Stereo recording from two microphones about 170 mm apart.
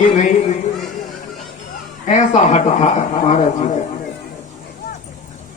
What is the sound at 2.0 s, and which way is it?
A woman's voice, 45° left (ahead or behind).